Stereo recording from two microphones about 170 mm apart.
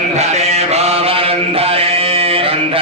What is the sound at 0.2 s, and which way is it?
Mantra, 40° right (ahead or behind).